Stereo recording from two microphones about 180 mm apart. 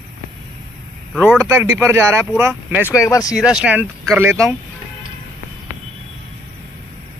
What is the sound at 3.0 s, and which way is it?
Speech, 20° left (ahead or behind).